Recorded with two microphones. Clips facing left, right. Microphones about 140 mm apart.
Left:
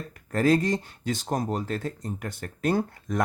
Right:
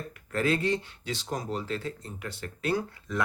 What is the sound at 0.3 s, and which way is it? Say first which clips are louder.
Speech: left 5 dB; 40° left (ahead or behind).